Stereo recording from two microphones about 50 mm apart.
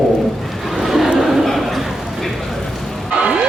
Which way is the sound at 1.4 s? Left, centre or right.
Centre.